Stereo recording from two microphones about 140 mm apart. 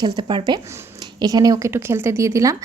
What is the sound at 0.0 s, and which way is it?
Speech, 30° right (ahead or behind).